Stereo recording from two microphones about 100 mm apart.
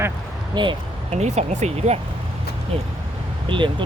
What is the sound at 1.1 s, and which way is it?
Speech, 90° right.